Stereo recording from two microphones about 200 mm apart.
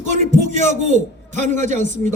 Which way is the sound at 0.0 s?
35° right (ahead or behind).